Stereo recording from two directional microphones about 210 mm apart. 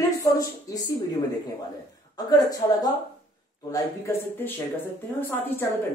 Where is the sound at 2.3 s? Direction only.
15° left (ahead or behind).